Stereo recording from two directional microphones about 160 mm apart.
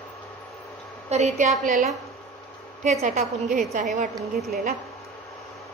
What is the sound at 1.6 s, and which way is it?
A woman's voice, 55° right (ahead or behind).